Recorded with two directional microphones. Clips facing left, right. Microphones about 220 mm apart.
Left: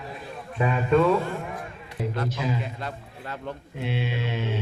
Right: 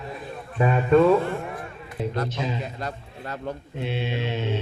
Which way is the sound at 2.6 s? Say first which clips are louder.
Right 2 dB; 40° right (ahead or behind).